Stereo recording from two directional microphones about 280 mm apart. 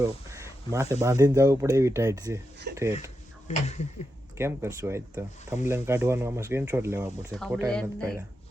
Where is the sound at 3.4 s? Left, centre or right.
Left.